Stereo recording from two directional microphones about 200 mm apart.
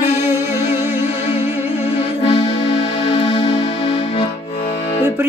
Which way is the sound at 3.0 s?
25° left (ahead or behind).